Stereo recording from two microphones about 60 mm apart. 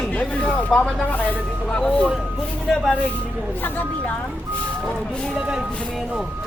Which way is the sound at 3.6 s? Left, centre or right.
Left.